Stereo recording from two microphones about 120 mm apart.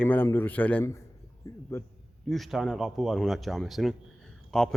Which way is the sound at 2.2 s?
Centre (ahead or behind).